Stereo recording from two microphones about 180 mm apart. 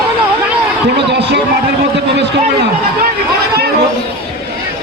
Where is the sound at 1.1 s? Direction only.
70° right (ahead or behind).